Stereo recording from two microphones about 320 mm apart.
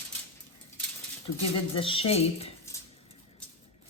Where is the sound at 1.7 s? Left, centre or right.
Centre.